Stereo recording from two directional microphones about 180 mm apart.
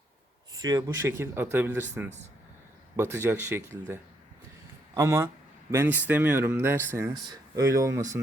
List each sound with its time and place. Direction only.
0.6 s speech: 20° right (ahead or behind)